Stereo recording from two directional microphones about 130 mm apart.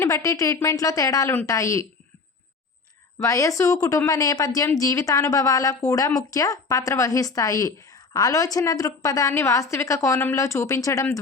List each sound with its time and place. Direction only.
0.0 s a woman's voice: 25° left (ahead or behind)
3.2 s a woman's voice: 25° left (ahead or behind)